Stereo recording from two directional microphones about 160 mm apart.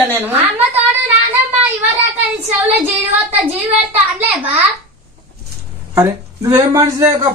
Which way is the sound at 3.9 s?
10° right (ahead or behind).